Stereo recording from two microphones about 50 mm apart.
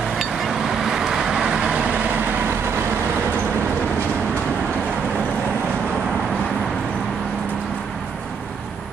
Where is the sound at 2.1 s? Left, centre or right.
Right.